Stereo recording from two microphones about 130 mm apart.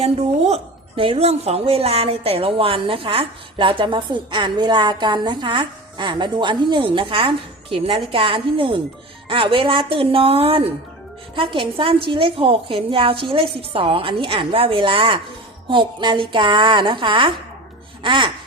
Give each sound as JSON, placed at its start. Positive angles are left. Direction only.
{"t": 0.0, "sound": "a woman's voice", "side_deg": -55}